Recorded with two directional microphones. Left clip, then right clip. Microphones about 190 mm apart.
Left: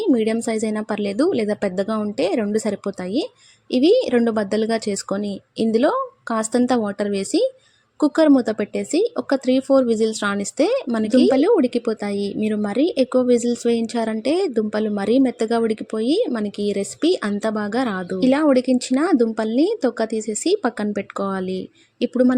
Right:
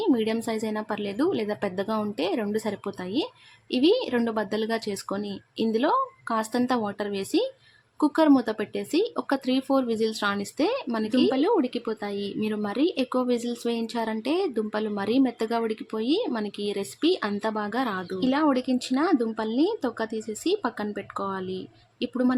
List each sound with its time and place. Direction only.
0.0 s speech: 20° left (ahead or behind)